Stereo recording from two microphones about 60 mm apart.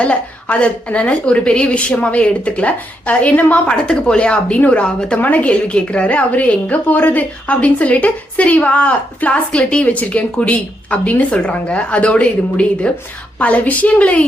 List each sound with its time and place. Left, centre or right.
0.0 s a woman's voice: centre
3.7 s a woman's voice: centre